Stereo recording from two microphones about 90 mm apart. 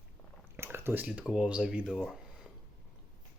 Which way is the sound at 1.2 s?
10° right (ahead or behind).